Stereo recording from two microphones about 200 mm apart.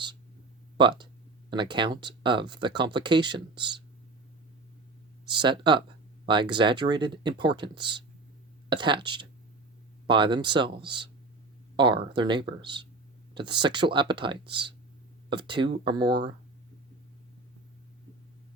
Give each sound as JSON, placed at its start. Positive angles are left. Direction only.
{"t": 0.8, "sound": "speech", "side_deg": -25}
{"t": 5.3, "sound": "speech", "side_deg": -25}